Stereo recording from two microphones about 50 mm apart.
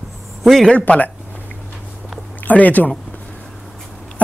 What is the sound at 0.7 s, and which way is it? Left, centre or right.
Speech, left.